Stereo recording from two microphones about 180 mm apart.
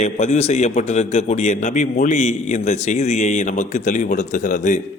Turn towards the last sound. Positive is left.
turn(degrees=45)  # may be behind; listen again after turning